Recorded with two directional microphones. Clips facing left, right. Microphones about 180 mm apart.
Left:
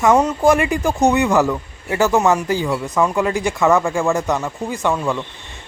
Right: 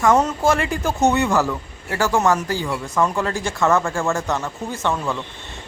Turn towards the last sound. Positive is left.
turn(degrees=15)  # may be behind; listen again after turning